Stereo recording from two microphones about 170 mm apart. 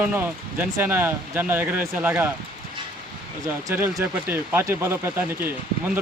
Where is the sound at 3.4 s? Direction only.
15° right (ahead or behind).